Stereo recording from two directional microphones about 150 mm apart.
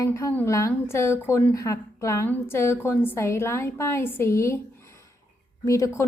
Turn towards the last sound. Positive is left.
turn(degrees=20)  # may be behind; listen again after turning